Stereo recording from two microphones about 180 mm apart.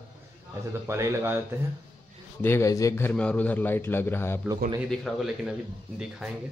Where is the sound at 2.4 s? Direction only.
15° left (ahead or behind).